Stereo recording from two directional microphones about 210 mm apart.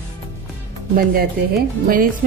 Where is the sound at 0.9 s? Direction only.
45° right (ahead or behind).